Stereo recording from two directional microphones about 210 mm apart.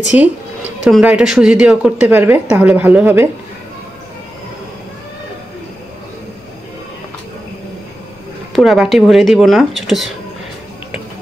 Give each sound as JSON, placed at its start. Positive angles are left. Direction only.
{"t": 0.1, "sound": "speech", "side_deg": -5}
{"t": 8.5, "sound": "speech", "side_deg": 0}